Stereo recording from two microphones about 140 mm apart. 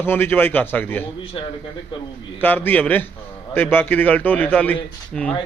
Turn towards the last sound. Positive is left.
turn(degrees=5)  # may be behind; listen again after turning